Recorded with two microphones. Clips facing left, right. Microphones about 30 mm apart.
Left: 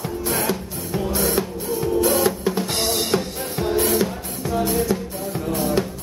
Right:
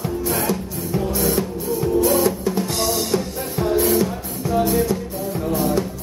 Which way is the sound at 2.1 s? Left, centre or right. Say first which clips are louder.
Right 1 dB; left.